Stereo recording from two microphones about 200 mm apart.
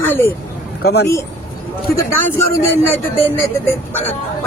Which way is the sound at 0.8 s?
55° left (ahead or behind).